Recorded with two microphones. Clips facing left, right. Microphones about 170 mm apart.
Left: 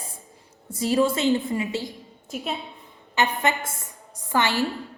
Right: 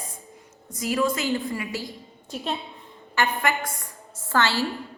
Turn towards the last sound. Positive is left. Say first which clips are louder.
# left 1 dB
turn(degrees=15)  # may be behind; listen again after turning